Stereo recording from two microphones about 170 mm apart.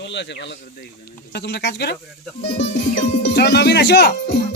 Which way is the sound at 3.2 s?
80° left.